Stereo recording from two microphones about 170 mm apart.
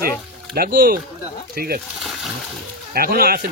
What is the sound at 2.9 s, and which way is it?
Speech, 65° right (ahead or behind).